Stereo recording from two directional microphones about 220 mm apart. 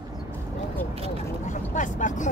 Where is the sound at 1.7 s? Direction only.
35° left (ahead or behind).